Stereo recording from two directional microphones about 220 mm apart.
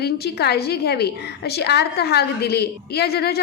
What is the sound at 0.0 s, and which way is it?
A woman's voice, 45° left (ahead or behind).